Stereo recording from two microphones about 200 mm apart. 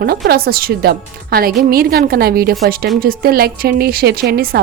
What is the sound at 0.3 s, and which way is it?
Speech, 50° right (ahead or behind).